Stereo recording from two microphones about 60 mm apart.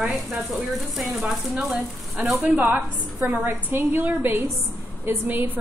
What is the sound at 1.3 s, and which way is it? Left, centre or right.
Speech, centre.